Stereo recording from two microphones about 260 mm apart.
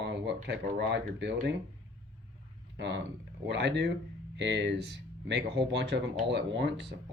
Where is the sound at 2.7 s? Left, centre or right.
Right.